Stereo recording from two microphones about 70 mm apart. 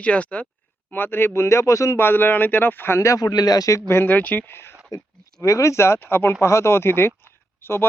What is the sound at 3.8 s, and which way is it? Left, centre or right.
Speech, left.